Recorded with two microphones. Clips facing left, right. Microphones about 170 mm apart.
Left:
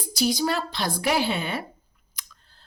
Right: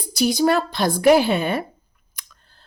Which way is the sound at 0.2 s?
55° right (ahead or behind).